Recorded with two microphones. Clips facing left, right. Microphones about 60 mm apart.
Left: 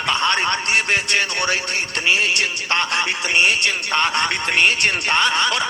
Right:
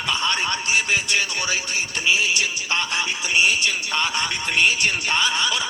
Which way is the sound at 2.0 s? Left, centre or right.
Left.